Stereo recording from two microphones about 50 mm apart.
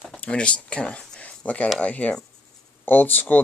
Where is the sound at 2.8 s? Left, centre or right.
Left.